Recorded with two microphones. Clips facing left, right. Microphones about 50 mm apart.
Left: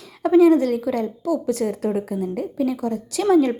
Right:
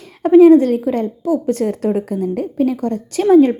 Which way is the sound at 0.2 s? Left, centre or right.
Right.